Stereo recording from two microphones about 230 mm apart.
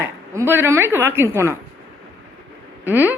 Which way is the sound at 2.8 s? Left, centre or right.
Centre.